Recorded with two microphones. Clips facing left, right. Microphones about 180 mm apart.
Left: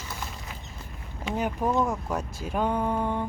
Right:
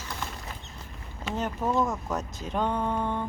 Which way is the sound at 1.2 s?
10° left (ahead or behind).